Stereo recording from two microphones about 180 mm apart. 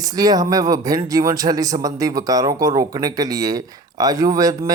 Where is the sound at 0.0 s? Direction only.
20° right (ahead or behind).